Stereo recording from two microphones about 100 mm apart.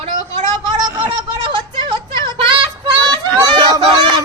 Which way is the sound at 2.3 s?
50° right (ahead or behind).